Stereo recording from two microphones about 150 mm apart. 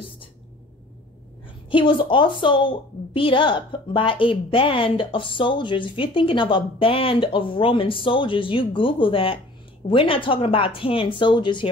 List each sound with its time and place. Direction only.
1.7 s a woman's voice: 35° left (ahead or behind)